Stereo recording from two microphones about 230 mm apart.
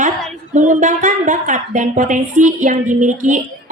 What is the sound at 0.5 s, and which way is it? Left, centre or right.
A woman's voice, right.